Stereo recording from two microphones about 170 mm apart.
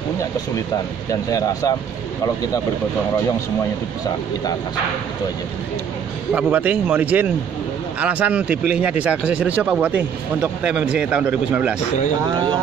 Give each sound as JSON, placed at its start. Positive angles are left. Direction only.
{"t": 1.3, "sound": "speech", "side_deg": 20}
{"t": 6.3, "sound": "speech", "side_deg": -10}